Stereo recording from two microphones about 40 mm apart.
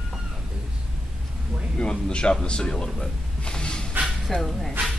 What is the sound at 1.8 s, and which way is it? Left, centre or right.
Speech, centre.